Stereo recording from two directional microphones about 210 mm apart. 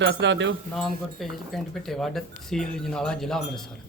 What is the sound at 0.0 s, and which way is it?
Speech, 55° right (ahead or behind).